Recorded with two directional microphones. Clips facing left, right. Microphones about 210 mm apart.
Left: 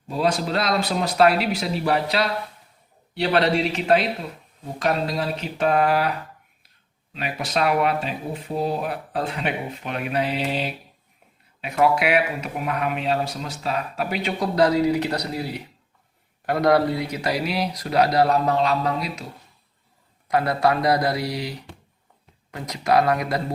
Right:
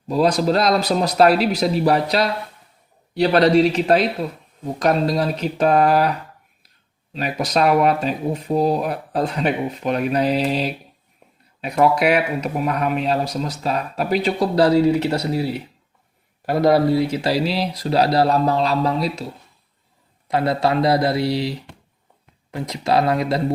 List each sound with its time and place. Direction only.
0.1 s speech: 40° right (ahead or behind)
7.1 s speech: 40° right (ahead or behind)
16.5 s speech: 25° right (ahead or behind)
20.2 s speech: 25° right (ahead or behind)